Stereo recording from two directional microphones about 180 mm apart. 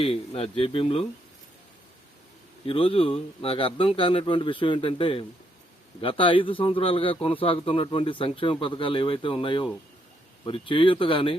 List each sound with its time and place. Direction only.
0.0 s speech: 30° left (ahead or behind)
2.6 s a man's voice: 30° left (ahead or behind)